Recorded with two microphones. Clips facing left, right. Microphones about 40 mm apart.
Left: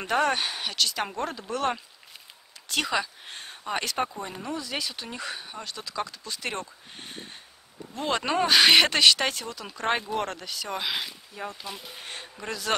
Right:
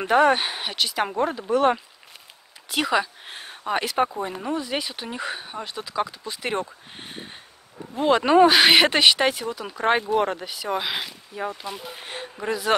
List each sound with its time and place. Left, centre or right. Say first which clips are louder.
0.0 s speech: right 6 dB; centre